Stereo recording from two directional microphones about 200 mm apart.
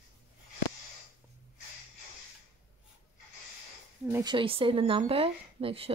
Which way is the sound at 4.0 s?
10° right (ahead or behind).